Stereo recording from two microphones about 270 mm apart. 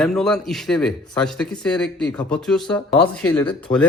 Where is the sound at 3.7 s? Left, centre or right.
Left.